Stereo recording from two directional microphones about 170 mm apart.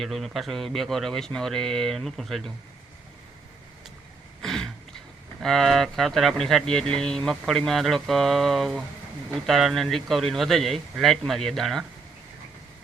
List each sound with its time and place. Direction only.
0.0 s speech: centre (ahead or behind)
4.4 s a sound: centre (ahead or behind)
5.4 s speech: centre (ahead or behind)